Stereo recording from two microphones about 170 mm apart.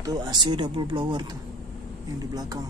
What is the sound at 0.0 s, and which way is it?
Speech, 25° right (ahead or behind).